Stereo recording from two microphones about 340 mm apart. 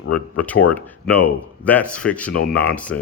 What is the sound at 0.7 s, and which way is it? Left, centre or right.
Speech, centre.